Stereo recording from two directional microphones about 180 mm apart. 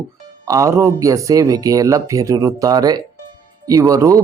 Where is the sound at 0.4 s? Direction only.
20° right (ahead or behind).